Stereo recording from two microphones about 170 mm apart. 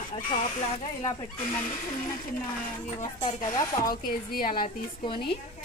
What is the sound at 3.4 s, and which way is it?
Speech, 20° left (ahead or behind).